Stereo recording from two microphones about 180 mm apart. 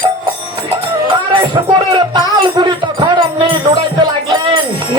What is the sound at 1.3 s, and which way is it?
Speech, 25° right (ahead or behind).